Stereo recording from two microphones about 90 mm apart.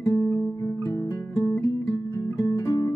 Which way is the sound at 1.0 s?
35° left (ahead or behind).